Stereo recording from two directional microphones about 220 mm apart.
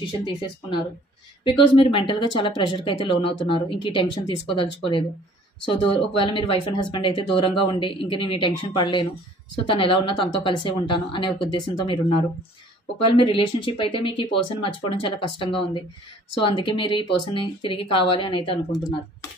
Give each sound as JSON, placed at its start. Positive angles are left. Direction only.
{"t": 0.0, "sound": "speech", "side_deg": 20}
{"t": 5.7, "sound": "speech", "side_deg": 25}
{"t": 13.1, "sound": "speech", "side_deg": 25}